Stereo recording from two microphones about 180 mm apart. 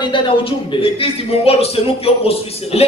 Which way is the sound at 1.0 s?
35° left (ahead or behind).